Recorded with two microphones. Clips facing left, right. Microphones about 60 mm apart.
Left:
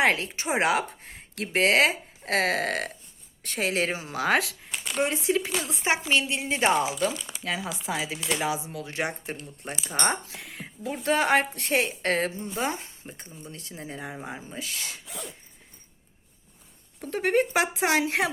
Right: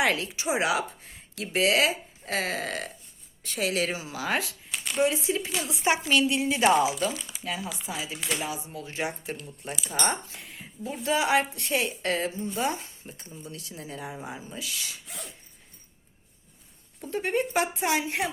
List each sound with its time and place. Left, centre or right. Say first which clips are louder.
0.0 s a woman's voice: left 2 dB; left
3.6 s speech: left 1 dB; left
4.2 s speech: left 6 dB; left
4.9 s speech: even; left
5.7 s speech: right 1 dB; left
7.4 s speech: left 3 dB; left
9.3 s speech: even; left
10.2 s a woman's voice: left 3 dB; left
17.0 s speech: left 4 dB; left